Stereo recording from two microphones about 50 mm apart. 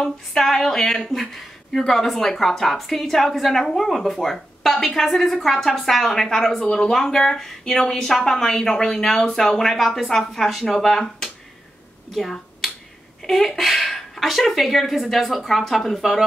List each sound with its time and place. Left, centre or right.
0.4 s a woman's voice: centre
6.9 s speech: centre
12.1 s finger snapping: centre
13.2 s a woman's voice: centre